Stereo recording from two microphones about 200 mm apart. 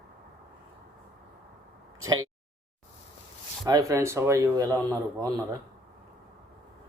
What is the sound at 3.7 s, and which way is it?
Speech, 15° right (ahead or behind).